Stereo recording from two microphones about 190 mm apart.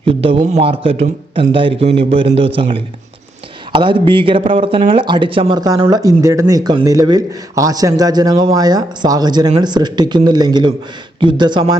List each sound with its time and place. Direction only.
0.0 s speech: 30° right (ahead or behind)